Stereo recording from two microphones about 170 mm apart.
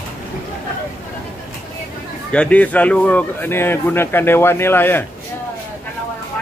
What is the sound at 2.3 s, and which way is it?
Speech, 5° left (ahead or behind).